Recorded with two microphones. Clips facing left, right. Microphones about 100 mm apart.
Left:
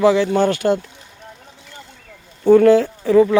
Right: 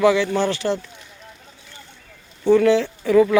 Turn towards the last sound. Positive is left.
turn(degrees=30)  # may be behind; listen again after turning